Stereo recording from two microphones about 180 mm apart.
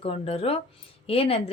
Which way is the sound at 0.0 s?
30° left (ahead or behind).